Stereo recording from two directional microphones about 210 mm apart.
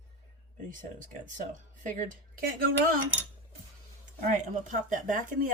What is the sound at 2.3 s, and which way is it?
Speech, 45° right (ahead or behind).